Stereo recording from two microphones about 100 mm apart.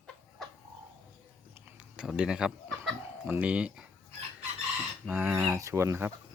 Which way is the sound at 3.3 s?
15° right (ahead or behind).